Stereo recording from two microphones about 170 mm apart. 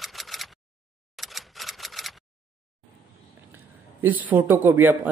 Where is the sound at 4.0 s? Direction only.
10° right (ahead or behind).